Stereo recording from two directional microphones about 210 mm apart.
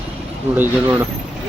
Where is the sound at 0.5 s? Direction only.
10° right (ahead or behind).